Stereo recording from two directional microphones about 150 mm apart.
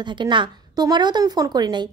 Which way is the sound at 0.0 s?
30° right (ahead or behind).